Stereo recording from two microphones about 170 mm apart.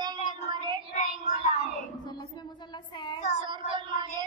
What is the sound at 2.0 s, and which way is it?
A woman's voice, 25° left (ahead or behind).